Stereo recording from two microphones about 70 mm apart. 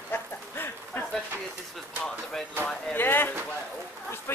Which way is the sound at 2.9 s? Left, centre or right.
Left.